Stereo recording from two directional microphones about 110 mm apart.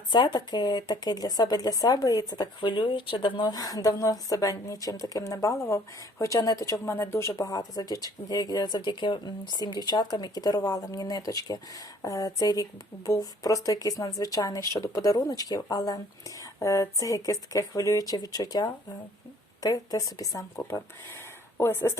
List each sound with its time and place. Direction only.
0.1 s speech: 40° left (ahead or behind)
20.6 s speech: 20° left (ahead or behind)